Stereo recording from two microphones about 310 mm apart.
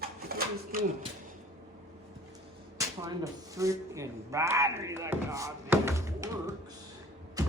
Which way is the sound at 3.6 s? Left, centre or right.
Centre.